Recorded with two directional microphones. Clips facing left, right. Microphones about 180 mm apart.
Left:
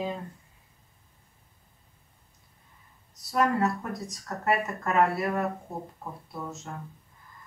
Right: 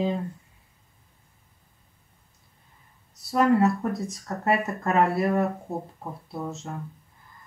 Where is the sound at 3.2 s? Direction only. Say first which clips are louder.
Right 5 dB; 25° right (ahead or behind).